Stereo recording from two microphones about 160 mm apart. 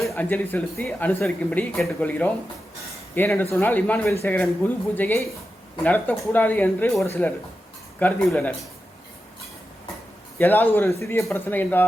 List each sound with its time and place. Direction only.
0.1 s speech: 10° left (ahead or behind)
10.3 s speech: 10° left (ahead or behind)